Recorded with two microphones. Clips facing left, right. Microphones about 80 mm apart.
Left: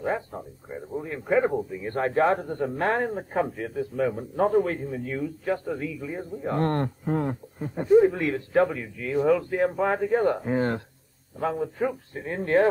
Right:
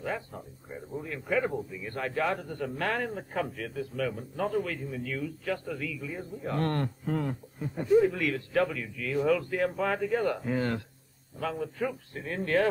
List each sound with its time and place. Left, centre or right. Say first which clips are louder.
0.0 s speech: left 6 dB; left